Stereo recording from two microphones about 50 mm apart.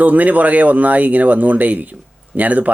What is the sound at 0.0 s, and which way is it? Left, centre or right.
Speech, right.